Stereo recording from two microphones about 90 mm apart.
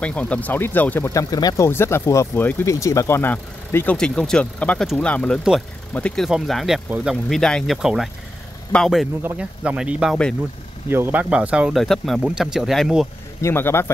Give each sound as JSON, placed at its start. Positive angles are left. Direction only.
{"t": 0.0, "sound": "speech", "side_deg": 15}
{"t": 1.1, "sound": "speech", "side_deg": 40}
{"t": 1.7, "sound": "speech", "side_deg": 25}
{"t": 3.2, "sound": "speech", "side_deg": 20}
{"t": 3.9, "sound": "speech", "side_deg": 10}
{"t": 6.1, "sound": "speech", "side_deg": 0}
{"t": 9.4, "sound": "speech", "side_deg": -10}
{"t": 10.9, "sound": "speech", "side_deg": -25}
{"t": 11.7, "sound": "speech", "side_deg": 0}
{"t": 13.4, "sound": "speech", "side_deg": 30}